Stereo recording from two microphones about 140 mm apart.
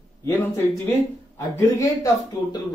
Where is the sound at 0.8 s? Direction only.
20° left (ahead or behind).